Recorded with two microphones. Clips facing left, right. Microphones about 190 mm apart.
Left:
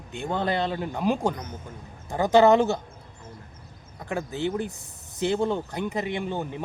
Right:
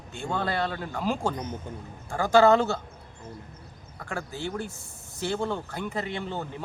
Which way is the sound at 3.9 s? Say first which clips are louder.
Left 5 dB; 20° left (ahead or behind).